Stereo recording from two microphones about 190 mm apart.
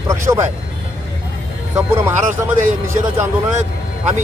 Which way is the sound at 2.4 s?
10° right (ahead or behind).